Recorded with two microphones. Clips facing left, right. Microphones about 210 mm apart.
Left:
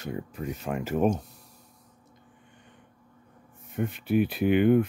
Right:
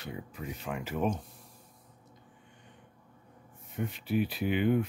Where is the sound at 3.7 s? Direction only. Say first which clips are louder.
Left 6 dB; 55° left (ahead or behind).